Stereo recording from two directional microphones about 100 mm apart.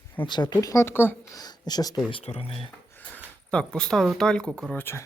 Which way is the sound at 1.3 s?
40° left (ahead or behind).